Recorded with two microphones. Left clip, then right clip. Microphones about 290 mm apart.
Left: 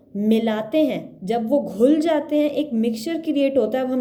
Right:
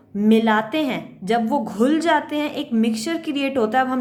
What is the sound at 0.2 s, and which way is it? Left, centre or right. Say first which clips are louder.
Speech: right 4 dB; centre.